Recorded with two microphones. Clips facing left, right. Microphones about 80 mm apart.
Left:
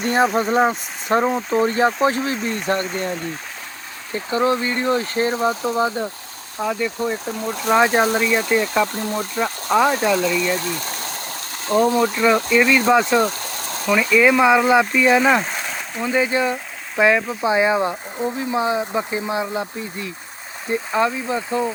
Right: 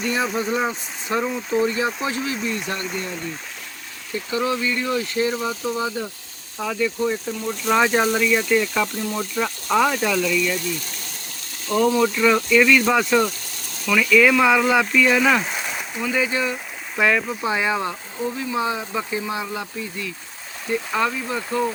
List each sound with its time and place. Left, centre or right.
0.0 s speech: left
13.1 s a sound: left
13.9 s speech: left
15.4 s a sound: centre
16.0 s speech: left
17.0 s speech: centre; by 20.1 s left
20.7 s speech: centre